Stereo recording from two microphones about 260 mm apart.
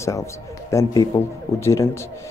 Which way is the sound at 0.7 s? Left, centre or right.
Centre.